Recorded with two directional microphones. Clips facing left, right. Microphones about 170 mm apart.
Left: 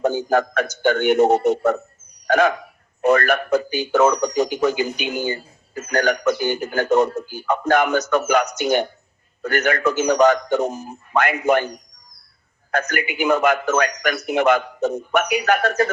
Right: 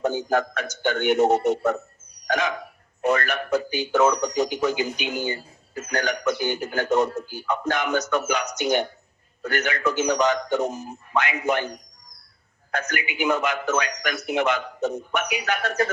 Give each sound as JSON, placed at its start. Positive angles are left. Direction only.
{"t": 0.0, "sound": "a man's voice", "side_deg": 50}
{"t": 2.2, "sound": "hiccup", "side_deg": 50}
{"t": 3.0, "sound": "speech", "side_deg": 55}
{"t": 12.9, "sound": "speech", "side_deg": 50}